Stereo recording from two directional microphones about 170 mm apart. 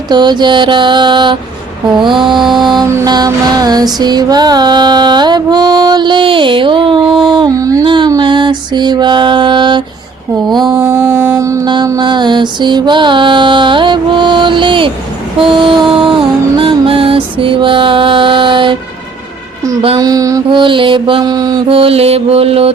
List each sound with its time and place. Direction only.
0.1 s mantra: 25° right (ahead or behind)
10.8 s mantra: 15° right (ahead or behind); by 14.9 s 30° right (ahead or behind)
15.4 s music: 30° right (ahead or behind)
20.0 s mantra: 20° right (ahead or behind)